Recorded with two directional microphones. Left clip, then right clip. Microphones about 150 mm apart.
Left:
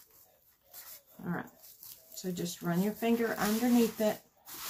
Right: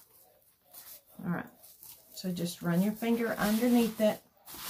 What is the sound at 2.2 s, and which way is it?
Speech, 40° right (ahead or behind).